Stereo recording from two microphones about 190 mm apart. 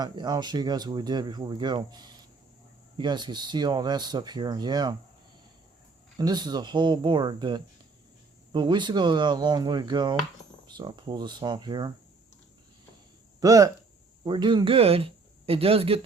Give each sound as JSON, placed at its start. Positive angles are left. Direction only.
{"t": 0.0, "sound": "speech", "side_deg": -20}
{"t": 6.1, "sound": "speech", "side_deg": -20}
{"t": 13.4, "sound": "speech", "side_deg": -15}